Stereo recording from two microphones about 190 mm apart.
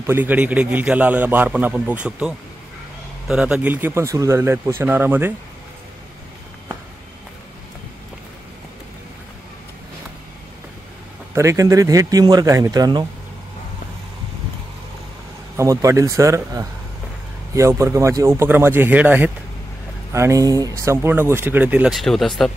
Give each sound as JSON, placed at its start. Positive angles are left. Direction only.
{"t": 0.0, "sound": "speech", "side_deg": -10}
{"t": 11.3, "sound": "speech", "side_deg": -15}
{"t": 15.5, "sound": "speech", "side_deg": -15}